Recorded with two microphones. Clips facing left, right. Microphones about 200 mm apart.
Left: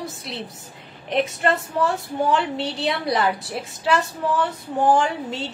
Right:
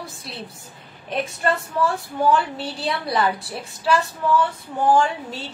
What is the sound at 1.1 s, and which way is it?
Speech, 20° left (ahead or behind).